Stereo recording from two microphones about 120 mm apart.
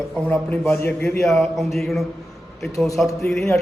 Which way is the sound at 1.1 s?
Centre (ahead or behind).